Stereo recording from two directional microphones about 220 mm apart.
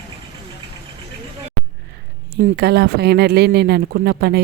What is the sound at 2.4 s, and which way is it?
Speech, 45° right (ahead or behind).